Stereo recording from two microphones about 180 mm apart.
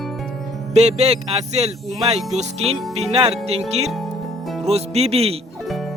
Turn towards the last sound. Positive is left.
turn(degrees=-35)  # may be behind; listen again after turning